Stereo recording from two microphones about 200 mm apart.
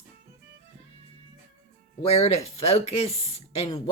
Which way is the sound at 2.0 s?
30° left (ahead or behind).